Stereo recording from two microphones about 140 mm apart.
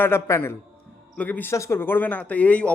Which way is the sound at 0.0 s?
20° left (ahead or behind).